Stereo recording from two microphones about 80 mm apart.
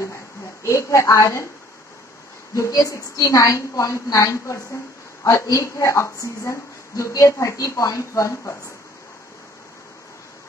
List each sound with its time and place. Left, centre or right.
0.7 s a woman's voice: left
2.5 s a woman's voice: left